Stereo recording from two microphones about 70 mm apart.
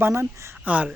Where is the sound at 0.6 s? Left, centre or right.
Right.